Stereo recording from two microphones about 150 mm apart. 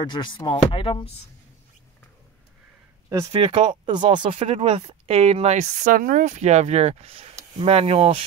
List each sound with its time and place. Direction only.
0.0 s speech: 30° left (ahead or behind)
3.3 s speech: 40° right (ahead or behind)